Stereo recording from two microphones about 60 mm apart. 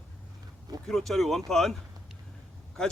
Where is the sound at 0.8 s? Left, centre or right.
Centre.